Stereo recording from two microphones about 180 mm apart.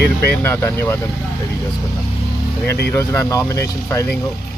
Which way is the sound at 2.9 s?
15° left (ahead or behind).